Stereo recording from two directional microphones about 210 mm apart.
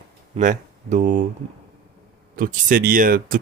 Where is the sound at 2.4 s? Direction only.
40° right (ahead or behind).